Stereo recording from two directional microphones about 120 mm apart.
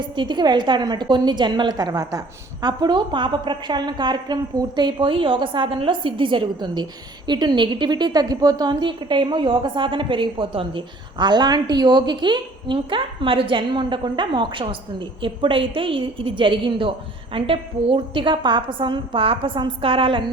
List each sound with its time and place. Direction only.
0.0 s a woman's voice: 40° right (ahead or behind)